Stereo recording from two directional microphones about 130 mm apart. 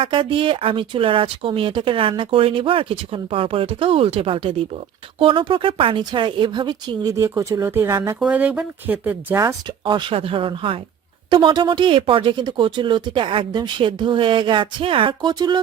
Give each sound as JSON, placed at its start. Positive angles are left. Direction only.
{"t": 0.0, "sound": "speech", "side_deg": -40}
{"t": 9.4, "sound": "speech", "side_deg": -25}
{"t": 9.8, "sound": "speech", "side_deg": -40}